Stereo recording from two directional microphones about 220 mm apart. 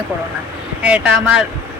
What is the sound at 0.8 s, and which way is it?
Speech, 5° right (ahead or behind).